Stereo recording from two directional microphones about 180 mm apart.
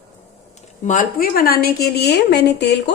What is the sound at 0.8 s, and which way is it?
Speech, 50° left (ahead or behind).